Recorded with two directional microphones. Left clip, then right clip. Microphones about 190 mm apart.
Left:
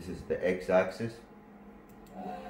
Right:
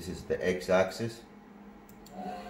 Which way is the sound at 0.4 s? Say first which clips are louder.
Even; 60° right (ahead or behind).